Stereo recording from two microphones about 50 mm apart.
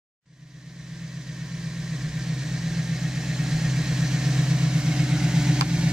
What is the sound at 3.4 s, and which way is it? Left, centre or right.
Vehicle, centre.